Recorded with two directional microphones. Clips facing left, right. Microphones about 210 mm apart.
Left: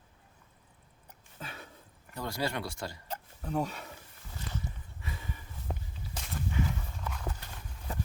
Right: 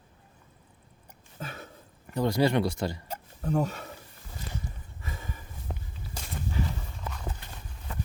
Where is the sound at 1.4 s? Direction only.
45° right (ahead or behind).